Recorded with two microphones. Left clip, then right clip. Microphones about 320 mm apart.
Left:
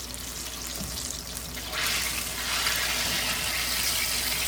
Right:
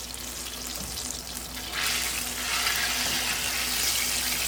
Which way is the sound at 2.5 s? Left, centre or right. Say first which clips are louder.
Even; centre.